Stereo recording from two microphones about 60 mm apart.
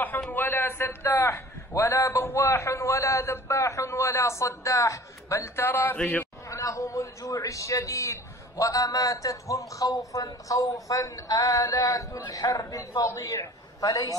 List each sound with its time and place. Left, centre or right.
0.3 s a man's voice: left
6.4 s a man's voice: left